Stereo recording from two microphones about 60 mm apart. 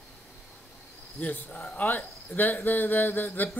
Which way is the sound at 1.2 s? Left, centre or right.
Left.